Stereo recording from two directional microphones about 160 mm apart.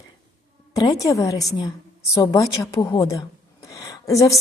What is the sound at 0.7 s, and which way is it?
A woman's voice, 20° left (ahead or behind).